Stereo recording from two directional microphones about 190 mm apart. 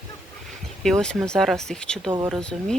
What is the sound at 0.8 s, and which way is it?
Speech, centre (ahead or behind).